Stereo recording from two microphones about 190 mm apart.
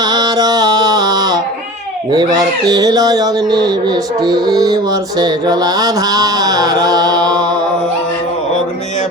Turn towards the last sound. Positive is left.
turn(degrees=-20)  # may be behind; listen again after turning